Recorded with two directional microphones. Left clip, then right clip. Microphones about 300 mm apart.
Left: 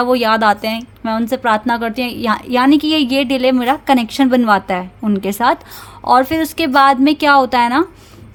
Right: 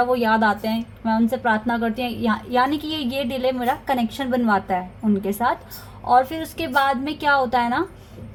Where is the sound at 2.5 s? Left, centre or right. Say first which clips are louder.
Left 9 dB; left.